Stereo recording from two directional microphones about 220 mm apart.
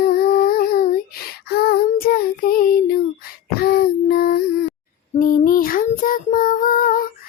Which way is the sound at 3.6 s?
45° left (ahead or behind).